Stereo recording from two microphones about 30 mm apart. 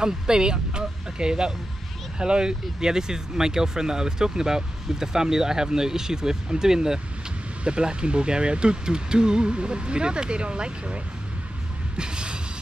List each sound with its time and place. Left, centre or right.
0.0 s speech: right
7.6 s speech: right
12.0 s a sound: right